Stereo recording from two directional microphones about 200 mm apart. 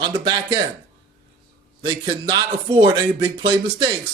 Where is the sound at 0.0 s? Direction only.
20° right (ahead or behind).